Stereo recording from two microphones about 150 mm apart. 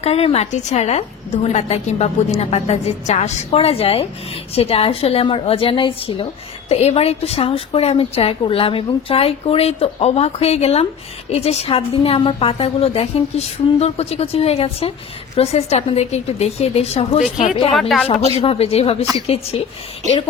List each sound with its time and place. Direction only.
0.0 s a woman's voice: 40° left (ahead or behind)
17.7 s speech: centre (ahead or behind)
18.3 s a woman's voice: 40° left (ahead or behind)